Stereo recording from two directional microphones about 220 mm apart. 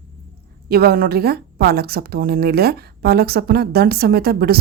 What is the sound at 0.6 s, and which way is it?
A woman's voice, 45° right (ahead or behind).